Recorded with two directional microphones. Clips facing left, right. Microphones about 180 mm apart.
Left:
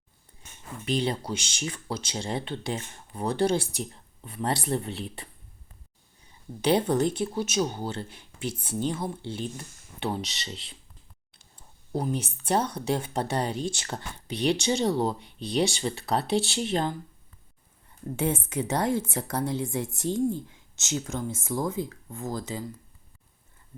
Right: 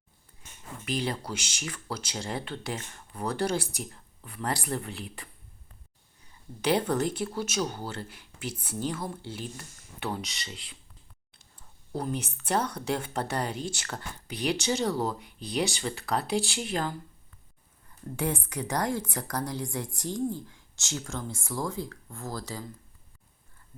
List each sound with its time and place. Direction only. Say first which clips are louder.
0.9 s speech: left 4 dB; 25° left (ahead or behind)
6.6 s speech: left 3 dB; 20° left (ahead or behind)
11.9 s speech: left 3 dB; 20° left (ahead or behind)
18.2 s speech: left 3 dB; 25° left (ahead or behind)